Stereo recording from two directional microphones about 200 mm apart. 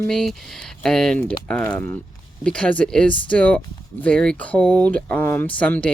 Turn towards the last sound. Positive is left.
turn(degrees=5)  # may be behind; listen again after turning